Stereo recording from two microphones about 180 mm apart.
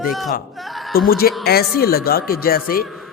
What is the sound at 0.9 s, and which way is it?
A man's voice, 55° left (ahead or behind).